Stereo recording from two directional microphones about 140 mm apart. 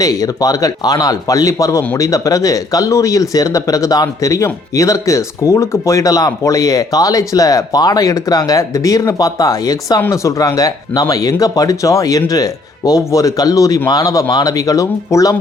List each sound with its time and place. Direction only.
0.0 s speech: 25° left (ahead or behind)